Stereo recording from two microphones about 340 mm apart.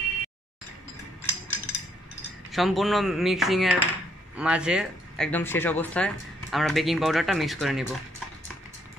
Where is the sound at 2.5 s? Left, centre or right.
Centre.